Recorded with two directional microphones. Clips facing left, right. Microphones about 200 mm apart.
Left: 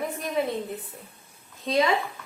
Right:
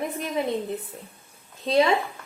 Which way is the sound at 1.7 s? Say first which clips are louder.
Right 3 dB; 30° right (ahead or behind).